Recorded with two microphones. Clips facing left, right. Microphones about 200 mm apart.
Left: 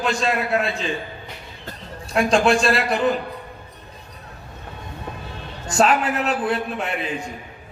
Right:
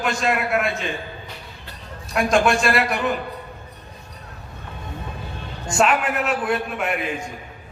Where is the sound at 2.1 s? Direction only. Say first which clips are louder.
Left 1 dB; 30° left (ahead or behind).